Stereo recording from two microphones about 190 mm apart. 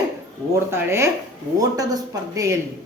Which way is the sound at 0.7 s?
15° right (ahead or behind).